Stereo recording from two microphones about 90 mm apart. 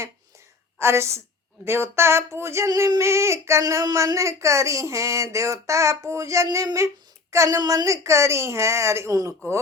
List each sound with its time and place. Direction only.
0.8 s a child's voice: 30° right (ahead or behind)